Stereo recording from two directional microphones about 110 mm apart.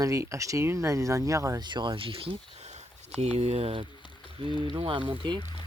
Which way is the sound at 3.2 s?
75° right (ahead or behind).